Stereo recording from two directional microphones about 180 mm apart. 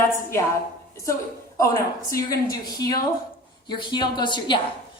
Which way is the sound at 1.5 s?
20° left (ahead or behind).